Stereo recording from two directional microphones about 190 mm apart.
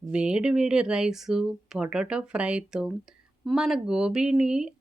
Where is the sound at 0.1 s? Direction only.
5° right (ahead or behind).